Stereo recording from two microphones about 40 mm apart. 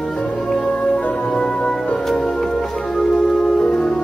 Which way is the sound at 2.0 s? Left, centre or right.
Centre.